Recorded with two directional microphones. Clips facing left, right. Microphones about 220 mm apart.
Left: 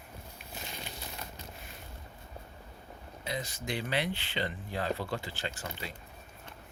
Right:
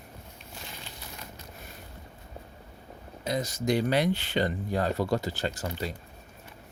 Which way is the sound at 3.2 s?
40° right (ahead or behind).